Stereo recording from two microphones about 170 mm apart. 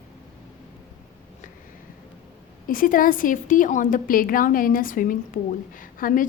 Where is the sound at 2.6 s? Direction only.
55° left (ahead or behind).